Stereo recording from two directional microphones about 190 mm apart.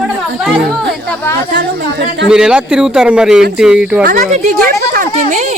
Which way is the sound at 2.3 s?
5° right (ahead or behind).